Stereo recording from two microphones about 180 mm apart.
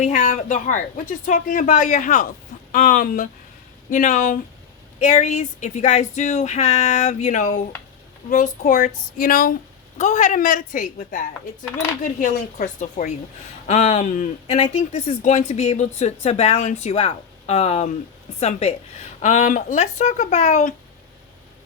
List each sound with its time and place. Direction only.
0.0 s speech: 45° left (ahead or behind)